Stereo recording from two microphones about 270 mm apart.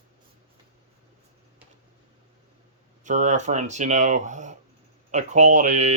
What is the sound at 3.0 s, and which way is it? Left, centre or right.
Speech, right.